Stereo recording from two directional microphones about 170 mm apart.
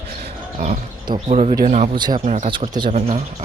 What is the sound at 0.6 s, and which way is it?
Speech, 55° right (ahead or behind).